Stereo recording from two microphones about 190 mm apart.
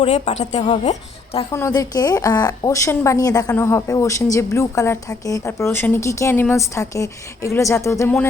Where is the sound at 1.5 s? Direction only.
15° left (ahead or behind).